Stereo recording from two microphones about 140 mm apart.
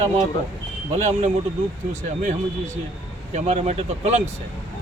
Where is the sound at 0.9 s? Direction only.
55° right (ahead or behind).